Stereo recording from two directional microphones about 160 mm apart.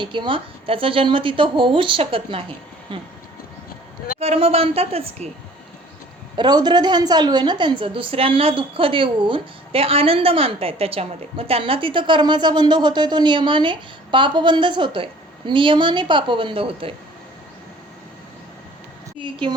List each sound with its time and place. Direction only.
0.0 s a woman's voice: 30° right (ahead or behind)
4.2 s a woman's voice: 40° right (ahead or behind)
6.3 s a woman's voice: 25° right (ahead or behind)
19.2 s a woman's voice: 30° right (ahead or behind)